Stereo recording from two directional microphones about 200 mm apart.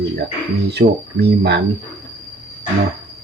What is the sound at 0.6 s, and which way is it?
Speech, 55° right (ahead or behind).